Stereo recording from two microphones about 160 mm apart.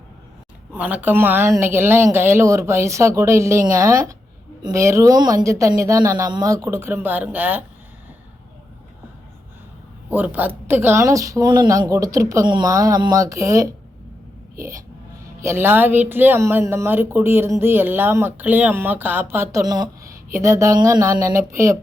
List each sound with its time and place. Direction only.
0.7 s speech: 10° right (ahead or behind)
10.1 s speech: 10° right (ahead or behind)
15.4 s speech: 15° right (ahead or behind)